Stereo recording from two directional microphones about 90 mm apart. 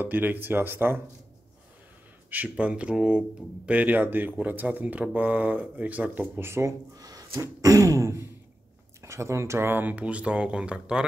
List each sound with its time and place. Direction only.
0.0 s speech: 20° right (ahead or behind)
2.3 s speech: 15° right (ahead or behind)
7.0 s a sound: 45° right (ahead or behind)
7.4 s throat clearing: 40° right (ahead or behind)
9.0 s speech: 35° right (ahead or behind); by 11.1 s 10° right (ahead or behind)